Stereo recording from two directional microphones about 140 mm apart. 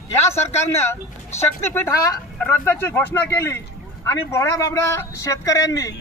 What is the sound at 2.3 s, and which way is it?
A man's voice, 10° left (ahead or behind).